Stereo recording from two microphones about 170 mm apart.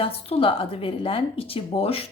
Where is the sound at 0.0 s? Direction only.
35° left (ahead or behind).